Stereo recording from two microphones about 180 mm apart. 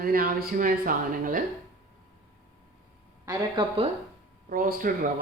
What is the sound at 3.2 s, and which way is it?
Speech, 20° right (ahead or behind).